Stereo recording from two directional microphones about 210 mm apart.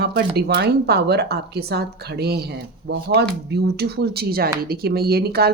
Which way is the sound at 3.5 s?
50° right (ahead or behind).